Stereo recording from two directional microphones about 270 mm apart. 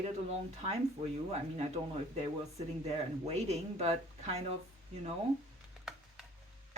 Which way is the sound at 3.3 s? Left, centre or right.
Right.